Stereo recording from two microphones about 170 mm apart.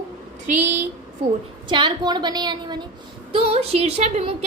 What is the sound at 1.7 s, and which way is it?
A woman's voice, 25° right (ahead or behind).